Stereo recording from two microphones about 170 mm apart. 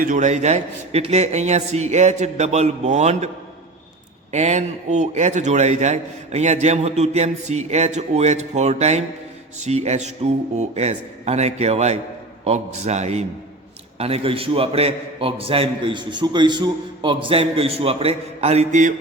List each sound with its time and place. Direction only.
0.0 s a man's voice: 50° right (ahead or behind)
4.3 s a man's voice: 40° right (ahead or behind)